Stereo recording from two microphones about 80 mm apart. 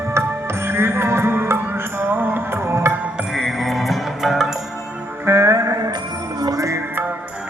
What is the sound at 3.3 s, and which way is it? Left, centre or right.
Music, centre.